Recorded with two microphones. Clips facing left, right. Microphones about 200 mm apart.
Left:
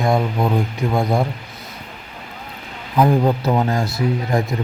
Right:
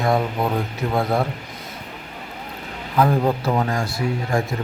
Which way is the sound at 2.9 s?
15° left (ahead or behind).